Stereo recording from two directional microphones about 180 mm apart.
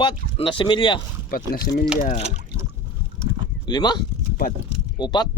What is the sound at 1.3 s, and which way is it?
Speech, 60° left (ahead or behind).